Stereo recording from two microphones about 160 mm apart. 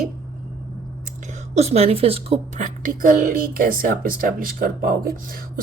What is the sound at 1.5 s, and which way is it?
Speech, 40° right (ahead or behind).